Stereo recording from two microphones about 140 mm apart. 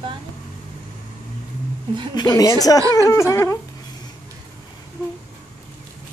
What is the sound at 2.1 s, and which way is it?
Speech, 25° left (ahead or behind).